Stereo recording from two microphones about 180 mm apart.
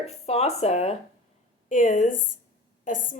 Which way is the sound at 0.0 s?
35° left (ahead or behind).